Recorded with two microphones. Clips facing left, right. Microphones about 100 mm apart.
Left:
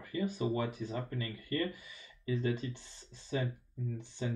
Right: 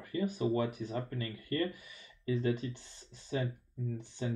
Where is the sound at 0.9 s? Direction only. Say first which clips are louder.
Right 1 dB; 40° right (ahead or behind).